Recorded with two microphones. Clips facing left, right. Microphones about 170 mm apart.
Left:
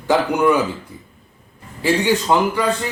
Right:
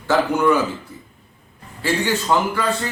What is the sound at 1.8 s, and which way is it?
Speech, 15° left (ahead or behind).